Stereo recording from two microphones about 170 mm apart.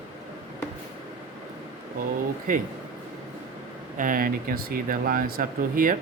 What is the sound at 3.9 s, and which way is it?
Speech, 55° right (ahead or behind).